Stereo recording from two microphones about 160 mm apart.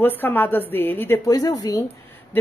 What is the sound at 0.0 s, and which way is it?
Speech, 10° left (ahead or behind).